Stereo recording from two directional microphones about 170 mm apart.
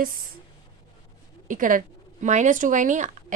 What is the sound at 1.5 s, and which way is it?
Speech, 50° right (ahead or behind).